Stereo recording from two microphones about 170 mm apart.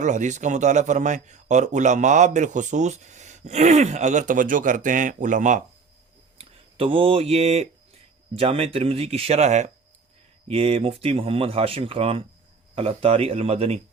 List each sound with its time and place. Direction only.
0.0 s a man's voice: 45° right (ahead or behind)
6.4 s speech: 35° right (ahead or behind)